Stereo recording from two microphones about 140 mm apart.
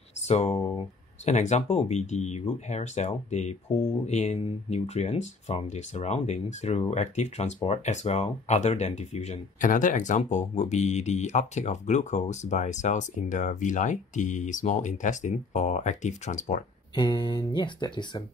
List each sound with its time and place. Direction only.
0.3 s speech: 50° left (ahead or behind)
16.9 s speech: 30° left (ahead or behind)